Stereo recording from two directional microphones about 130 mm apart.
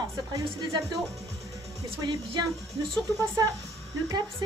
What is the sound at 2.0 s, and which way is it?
Speech, 35° right (ahead or behind).